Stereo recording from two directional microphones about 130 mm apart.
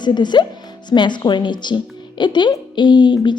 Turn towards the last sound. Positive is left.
turn(degrees=35)  # may be behind; listen again after turning